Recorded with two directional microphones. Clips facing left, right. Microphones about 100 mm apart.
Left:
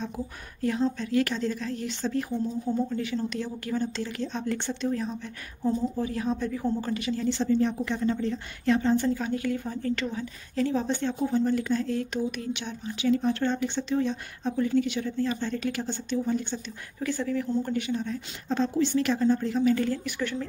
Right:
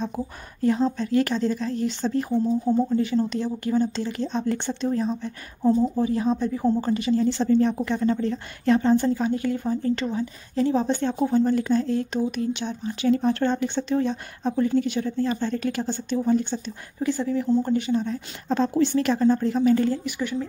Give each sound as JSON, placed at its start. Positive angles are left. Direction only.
{"t": 0.6, "sound": "speech", "side_deg": -30}
{"t": 7.2, "sound": "a woman's voice", "side_deg": -45}
{"t": 9.1, "sound": "speech", "side_deg": -30}
{"t": 17.0, "sound": "speech", "side_deg": -20}
{"t": 18.6, "sound": "speech", "side_deg": -45}
{"t": 20.1, "sound": "speech", "side_deg": -10}